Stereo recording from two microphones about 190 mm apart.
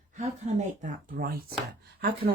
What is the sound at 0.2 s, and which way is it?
Speech, 40° right (ahead or behind).